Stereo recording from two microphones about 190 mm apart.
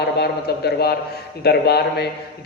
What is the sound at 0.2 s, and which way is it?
A man's voice, 55° left (ahead or behind).